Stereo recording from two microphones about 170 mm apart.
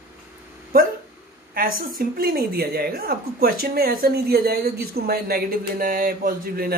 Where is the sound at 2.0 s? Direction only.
60° right (ahead or behind).